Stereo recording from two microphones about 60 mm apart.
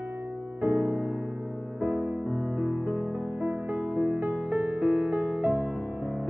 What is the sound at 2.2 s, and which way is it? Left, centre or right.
Music, centre.